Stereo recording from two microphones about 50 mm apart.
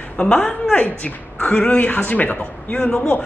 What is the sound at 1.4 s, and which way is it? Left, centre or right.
Speech, centre.